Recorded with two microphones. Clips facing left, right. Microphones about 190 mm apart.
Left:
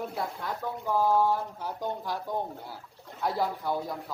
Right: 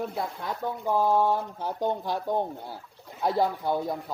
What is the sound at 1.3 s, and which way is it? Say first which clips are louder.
Speech: right 2 dB; 25° right (ahead or behind).